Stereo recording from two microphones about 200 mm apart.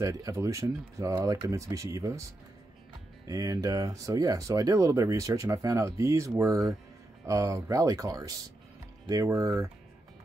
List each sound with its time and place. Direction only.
0.0 s speech: 15° right (ahead or behind)
3.3 s speech: 20° right (ahead or behind)